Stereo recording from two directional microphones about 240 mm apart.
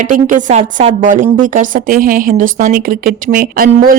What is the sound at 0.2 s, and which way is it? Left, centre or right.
A woman's voice, right.